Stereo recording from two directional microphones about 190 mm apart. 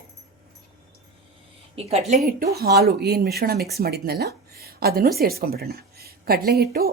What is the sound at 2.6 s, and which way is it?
A woman's voice, 55° right (ahead or behind).